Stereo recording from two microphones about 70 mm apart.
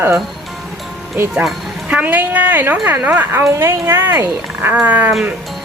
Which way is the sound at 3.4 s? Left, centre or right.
Right.